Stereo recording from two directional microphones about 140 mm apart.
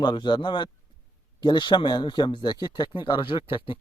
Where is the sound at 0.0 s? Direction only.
30° left (ahead or behind).